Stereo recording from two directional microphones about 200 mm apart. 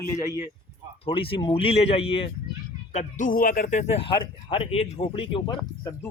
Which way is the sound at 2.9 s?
40° left (ahead or behind).